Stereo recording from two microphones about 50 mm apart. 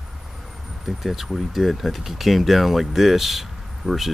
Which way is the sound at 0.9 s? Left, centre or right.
Centre.